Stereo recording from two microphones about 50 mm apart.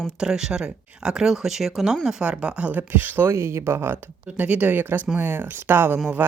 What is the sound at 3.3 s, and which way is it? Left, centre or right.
Speech, right.